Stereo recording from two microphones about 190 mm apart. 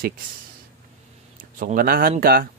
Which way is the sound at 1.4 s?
45° right (ahead or behind).